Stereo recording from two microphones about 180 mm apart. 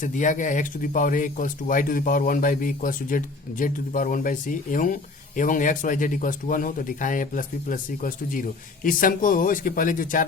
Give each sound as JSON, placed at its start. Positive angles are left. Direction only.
{"t": 0.0, "sound": "speech", "side_deg": 45}